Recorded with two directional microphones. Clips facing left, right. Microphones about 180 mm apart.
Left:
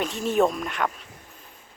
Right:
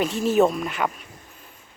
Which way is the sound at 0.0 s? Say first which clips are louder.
Right 3 dB; centre (ahead or behind).